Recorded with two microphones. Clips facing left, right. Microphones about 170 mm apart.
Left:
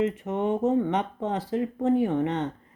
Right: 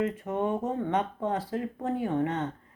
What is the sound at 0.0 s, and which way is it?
Speech, 25° left (ahead or behind).